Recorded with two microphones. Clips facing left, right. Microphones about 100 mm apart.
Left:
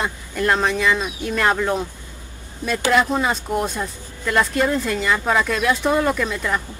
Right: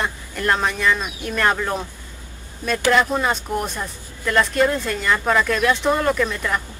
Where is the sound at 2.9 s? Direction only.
Centre (ahead or behind).